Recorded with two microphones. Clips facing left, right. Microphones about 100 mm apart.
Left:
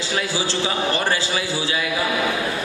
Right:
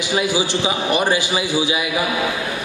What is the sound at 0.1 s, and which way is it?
A man's voice, 15° right (ahead or behind).